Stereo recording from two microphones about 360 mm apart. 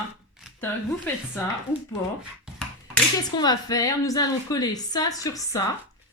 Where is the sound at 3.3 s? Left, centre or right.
Centre.